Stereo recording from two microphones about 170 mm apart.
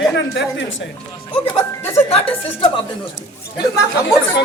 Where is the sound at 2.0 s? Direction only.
35° left (ahead or behind).